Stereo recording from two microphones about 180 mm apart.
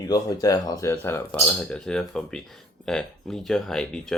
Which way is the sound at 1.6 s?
5° left (ahead or behind).